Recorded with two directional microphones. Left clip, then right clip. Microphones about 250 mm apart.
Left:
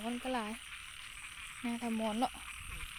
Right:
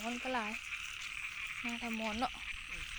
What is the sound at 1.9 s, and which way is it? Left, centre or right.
Speech, centre.